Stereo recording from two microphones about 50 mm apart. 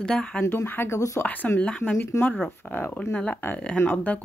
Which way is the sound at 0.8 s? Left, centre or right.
Left.